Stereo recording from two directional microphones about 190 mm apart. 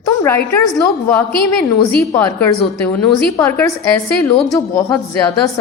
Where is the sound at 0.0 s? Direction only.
15° left (ahead or behind).